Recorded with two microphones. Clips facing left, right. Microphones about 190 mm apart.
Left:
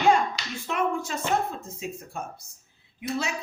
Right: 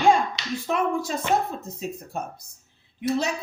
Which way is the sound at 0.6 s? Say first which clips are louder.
Right 2 dB; 35° right (ahead or behind).